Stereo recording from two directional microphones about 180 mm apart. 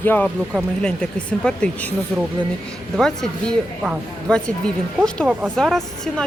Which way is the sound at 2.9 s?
Centre (ahead or behind).